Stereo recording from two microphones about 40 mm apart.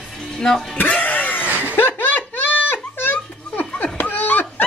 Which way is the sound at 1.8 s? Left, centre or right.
Left.